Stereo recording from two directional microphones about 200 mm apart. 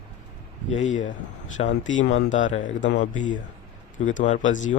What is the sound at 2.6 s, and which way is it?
Speech, 65° left (ahead or behind).